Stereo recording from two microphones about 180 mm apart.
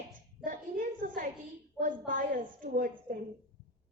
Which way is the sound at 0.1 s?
50° right (ahead or behind).